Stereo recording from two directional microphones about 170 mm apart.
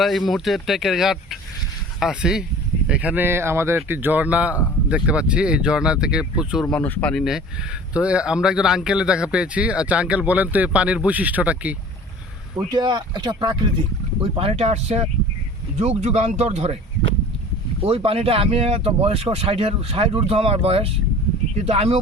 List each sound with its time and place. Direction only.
0.0 s speech: centre (ahead or behind)
12.5 s speech: 25° right (ahead or behind)
17.8 s speech: 35° right (ahead or behind)